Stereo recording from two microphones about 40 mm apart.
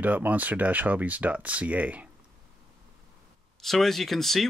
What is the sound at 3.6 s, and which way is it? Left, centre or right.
Speech, centre.